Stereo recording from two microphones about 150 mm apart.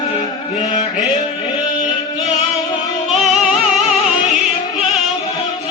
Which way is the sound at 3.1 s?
Centre (ahead or behind).